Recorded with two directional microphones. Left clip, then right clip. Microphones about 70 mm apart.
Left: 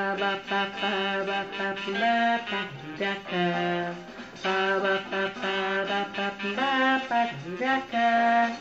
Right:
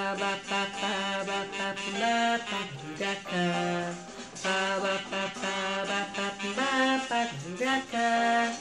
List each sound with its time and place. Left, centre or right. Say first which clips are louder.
0.0 s mantra: left 3 dB; right
4.4 s music: left 3 dB; right